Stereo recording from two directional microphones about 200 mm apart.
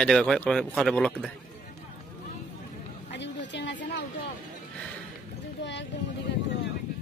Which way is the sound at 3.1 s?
60° left (ahead or behind).